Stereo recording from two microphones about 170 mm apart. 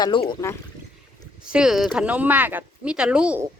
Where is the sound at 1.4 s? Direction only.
5° right (ahead or behind).